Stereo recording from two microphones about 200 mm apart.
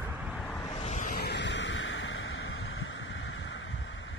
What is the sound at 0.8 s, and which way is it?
Vehicle, 35° left (ahead or behind).